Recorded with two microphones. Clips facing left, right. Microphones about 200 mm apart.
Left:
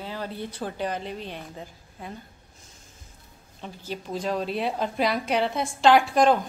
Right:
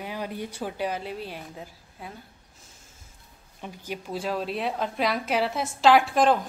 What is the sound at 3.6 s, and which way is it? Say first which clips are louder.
A woman's voice: even; 10° right (ahead or behind).